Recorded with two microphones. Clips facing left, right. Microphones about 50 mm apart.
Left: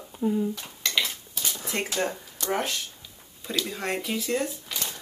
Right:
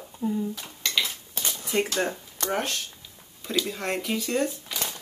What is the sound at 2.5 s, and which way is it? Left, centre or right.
Speech, centre.